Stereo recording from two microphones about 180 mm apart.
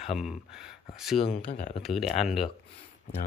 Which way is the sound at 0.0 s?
Centre (ahead or behind).